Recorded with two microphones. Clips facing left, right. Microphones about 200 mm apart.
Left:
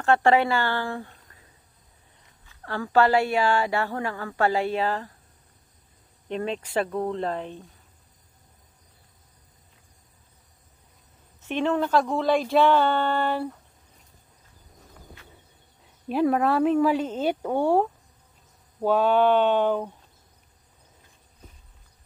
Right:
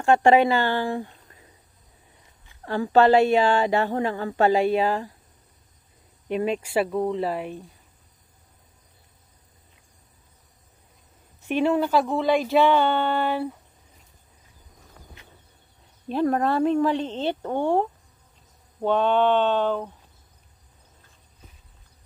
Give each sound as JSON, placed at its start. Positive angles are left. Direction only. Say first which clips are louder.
{"t": 0.0, "sound": "speech", "louder": "right 3 dB", "side_deg": -15}
{"t": 2.4, "sound": "a woman's voice", "louder": "right 5 dB", "side_deg": -15}
{"t": 6.2, "sound": "speech", "louder": "right 4 dB", "side_deg": -10}
{"t": 11.4, "sound": "speech", "louder": "right 3 dB", "side_deg": -10}
{"t": 16.1, "sound": "speech", "louder": "left 1 dB", "side_deg": 5}